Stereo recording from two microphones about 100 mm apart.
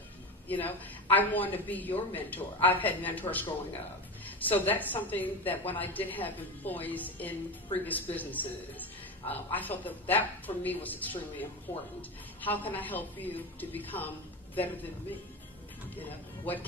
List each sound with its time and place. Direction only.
0.4 s a woman's voice: 20° left (ahead or behind)
4.5 s a woman's voice: 20° left (ahead or behind)
16.0 s speech: 20° left (ahead or behind)